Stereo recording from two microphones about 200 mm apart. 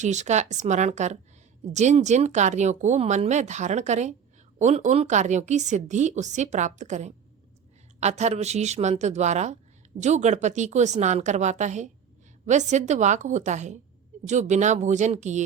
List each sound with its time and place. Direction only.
0.0 s speech: 35° right (ahead or behind)